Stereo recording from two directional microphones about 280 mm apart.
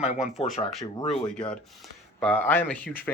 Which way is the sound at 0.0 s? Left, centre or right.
Centre.